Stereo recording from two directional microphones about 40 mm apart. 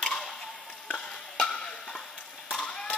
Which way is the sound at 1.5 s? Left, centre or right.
Centre.